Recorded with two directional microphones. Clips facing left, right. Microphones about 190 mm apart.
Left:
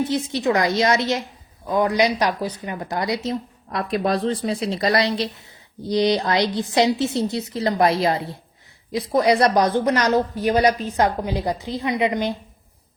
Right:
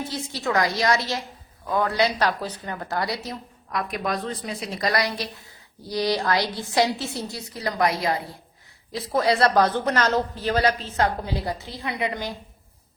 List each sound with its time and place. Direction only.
0.0 s a woman's voice: 20° left (ahead or behind)